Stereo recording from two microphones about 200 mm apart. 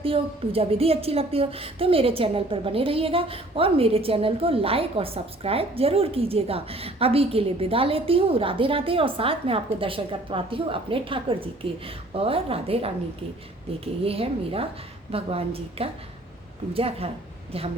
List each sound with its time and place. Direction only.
0.0 s a woman's voice: 30° right (ahead or behind)
14.0 s a woman's voice: 30° right (ahead or behind)